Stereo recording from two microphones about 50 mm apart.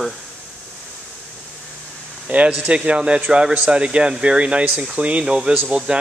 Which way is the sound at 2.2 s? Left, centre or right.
Right.